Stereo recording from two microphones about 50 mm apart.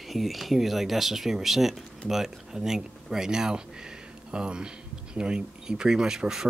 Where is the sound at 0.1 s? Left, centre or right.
Centre.